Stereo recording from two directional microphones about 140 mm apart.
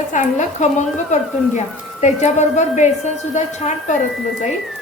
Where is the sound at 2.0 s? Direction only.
55° left (ahead or behind).